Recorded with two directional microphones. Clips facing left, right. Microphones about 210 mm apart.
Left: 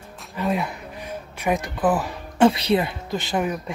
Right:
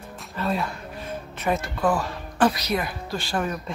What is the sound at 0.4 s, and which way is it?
Speech, 15° left (ahead or behind).